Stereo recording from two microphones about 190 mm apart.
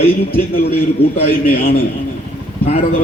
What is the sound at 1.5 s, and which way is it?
Speech, 50° left (ahead or behind).